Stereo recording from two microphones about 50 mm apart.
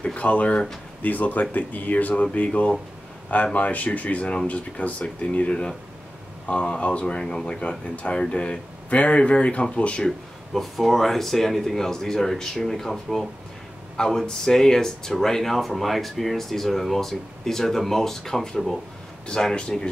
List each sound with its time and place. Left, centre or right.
0.0 s speech: left
10.0 s speech: centre
19.2 s speech: centre